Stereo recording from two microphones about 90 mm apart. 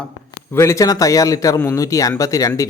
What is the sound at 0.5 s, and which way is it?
Speech, 30° left (ahead or behind).